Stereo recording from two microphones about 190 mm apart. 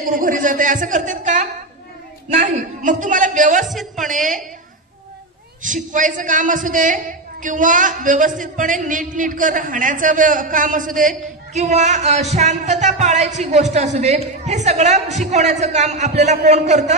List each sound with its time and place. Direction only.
0.0 s a woman's voice: 45° right (ahead or behind)
3.6 s speech: centre (ahead or behind)
4.1 s a man's voice: 45° right (ahead or behind)
5.6 s a man's voice: 40° right (ahead or behind)